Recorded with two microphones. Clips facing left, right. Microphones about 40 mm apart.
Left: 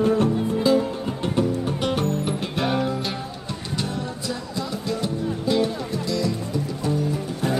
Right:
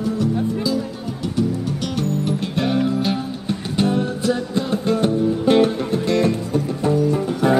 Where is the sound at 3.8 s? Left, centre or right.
Right.